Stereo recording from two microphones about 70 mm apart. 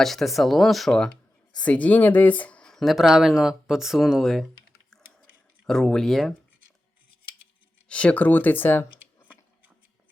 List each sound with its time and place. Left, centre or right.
0.0 s speech: centre
1.6 s speech: centre
2.8 s speech: centre
5.6 s speech: centre
7.9 s speech: centre